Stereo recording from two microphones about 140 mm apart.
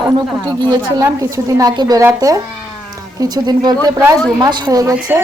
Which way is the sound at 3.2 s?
25° right (ahead or behind).